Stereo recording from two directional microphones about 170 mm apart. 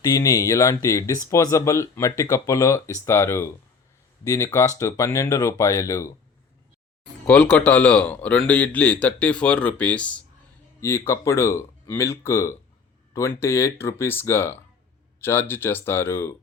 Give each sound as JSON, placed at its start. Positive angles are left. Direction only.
{"t": 0.0, "sound": "speech", "side_deg": 20}
{"t": 7.3, "sound": "speech", "side_deg": 10}
{"t": 10.8, "sound": "speech", "side_deg": 15}